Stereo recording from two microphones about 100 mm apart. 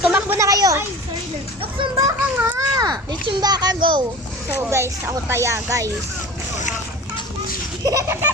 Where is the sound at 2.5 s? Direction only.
40° right (ahead or behind).